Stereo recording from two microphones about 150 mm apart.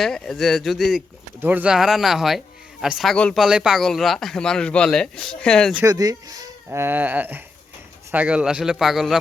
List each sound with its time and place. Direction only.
0.0 s speech: 5° left (ahead or behind)
1.4 s speech: 10° right (ahead or behind); by 5.7 s 5° left (ahead or behind)
5.8 s speech: 25° right (ahead or behind)
6.7 s speech: 15° right (ahead or behind)